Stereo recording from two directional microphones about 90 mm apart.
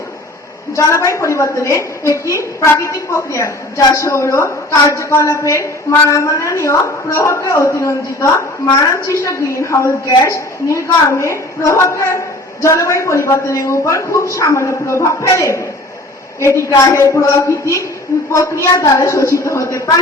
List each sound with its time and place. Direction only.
0.8 s a woman's voice: 35° left (ahead or behind)